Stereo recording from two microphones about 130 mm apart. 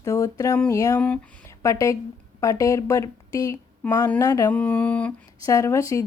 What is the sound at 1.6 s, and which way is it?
A woman's voice, 25° left (ahead or behind).